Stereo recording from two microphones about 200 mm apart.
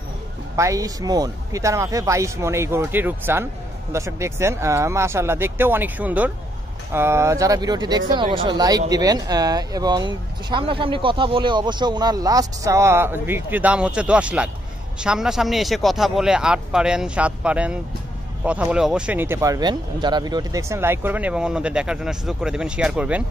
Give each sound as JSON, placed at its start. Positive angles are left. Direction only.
{"t": 0.6, "sound": "speech", "side_deg": -15}